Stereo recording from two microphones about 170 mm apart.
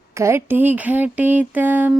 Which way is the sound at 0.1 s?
15° right (ahead or behind).